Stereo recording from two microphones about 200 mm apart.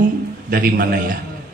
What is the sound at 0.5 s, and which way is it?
Speech, 50° right (ahead or behind).